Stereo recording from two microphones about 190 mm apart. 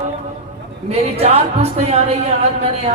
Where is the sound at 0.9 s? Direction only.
30° right (ahead or behind).